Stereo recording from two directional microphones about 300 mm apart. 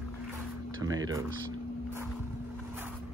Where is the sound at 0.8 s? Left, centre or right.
Centre.